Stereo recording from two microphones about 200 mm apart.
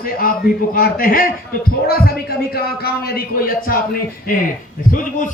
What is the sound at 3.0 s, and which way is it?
Speech, 50° left (ahead or behind).